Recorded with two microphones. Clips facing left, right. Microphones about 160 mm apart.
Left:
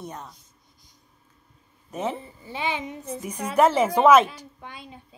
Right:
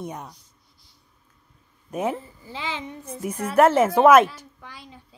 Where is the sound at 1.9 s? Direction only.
10° right (ahead or behind).